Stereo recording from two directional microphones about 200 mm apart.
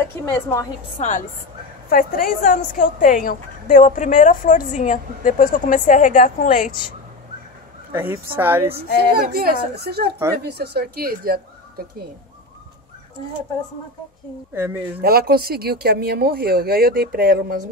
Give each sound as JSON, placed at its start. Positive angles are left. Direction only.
{"t": 0.2, "sound": "a woman's voice", "side_deg": 15}
{"t": 0.9, "sound": "a woman's voice", "side_deg": 35}
{"t": 7.9, "sound": "a woman's voice", "side_deg": -10}
{"t": 8.7, "sound": "speech", "side_deg": -50}
{"t": 14.5, "sound": "a woman's voice", "side_deg": -10}
{"t": 15.0, "sound": "speech", "side_deg": -50}